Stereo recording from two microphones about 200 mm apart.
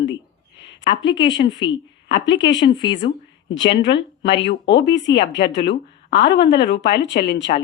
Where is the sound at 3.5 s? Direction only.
65° left (ahead or behind).